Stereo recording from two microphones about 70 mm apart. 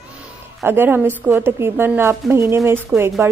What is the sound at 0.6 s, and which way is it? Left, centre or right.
A woman's voice, right.